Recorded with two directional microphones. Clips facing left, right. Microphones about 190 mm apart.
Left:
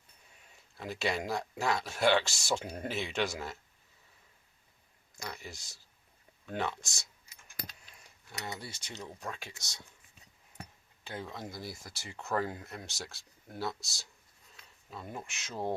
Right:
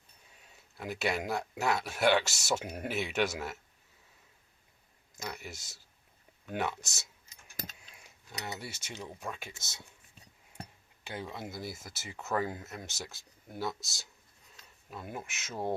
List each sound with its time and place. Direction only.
0.8 s speech: centre (ahead or behind)
5.3 s speech: 5° right (ahead or behind)
8.3 s cutlery: 20° right (ahead or behind)
8.5 s speech: 5° right (ahead or behind)
11.0 s speech: 10° right (ahead or behind)